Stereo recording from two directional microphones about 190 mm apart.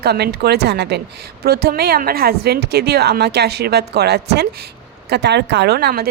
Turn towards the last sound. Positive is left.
turn(degrees=-55)  # may be behind; listen again after turning